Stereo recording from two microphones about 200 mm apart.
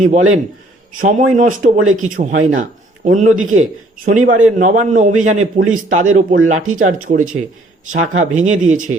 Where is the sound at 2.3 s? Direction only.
80° right.